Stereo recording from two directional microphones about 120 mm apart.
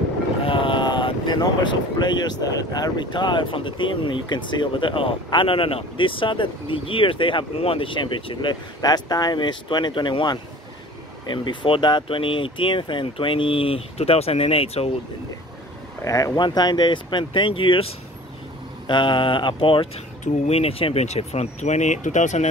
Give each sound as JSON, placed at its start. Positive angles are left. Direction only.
{"t": 0.5, "sound": "speech", "side_deg": 45}
{"t": 16.0, "sound": "speech", "side_deg": 25}
{"t": 20.4, "sound": "speech", "side_deg": 55}